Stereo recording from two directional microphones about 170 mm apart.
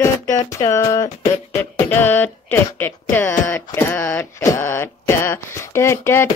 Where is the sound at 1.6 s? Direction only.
10° left (ahead or behind).